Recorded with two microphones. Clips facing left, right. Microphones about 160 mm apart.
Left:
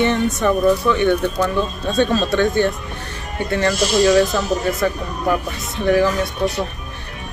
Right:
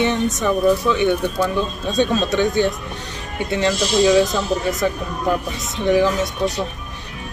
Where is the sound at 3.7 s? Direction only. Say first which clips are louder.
Left 1 dB; 45° left (ahead or behind).